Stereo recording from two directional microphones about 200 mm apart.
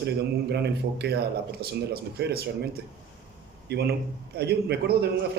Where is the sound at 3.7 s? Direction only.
55° right (ahead or behind).